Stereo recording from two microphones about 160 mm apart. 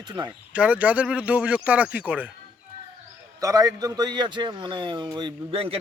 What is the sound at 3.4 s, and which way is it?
A man's voice, 20° right (ahead or behind).